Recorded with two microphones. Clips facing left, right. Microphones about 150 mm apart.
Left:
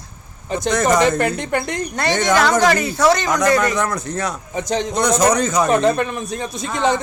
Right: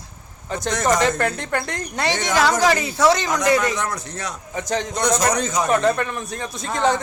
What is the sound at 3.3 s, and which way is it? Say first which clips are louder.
Speech: left 3 dB; 55° left (ahead or behind).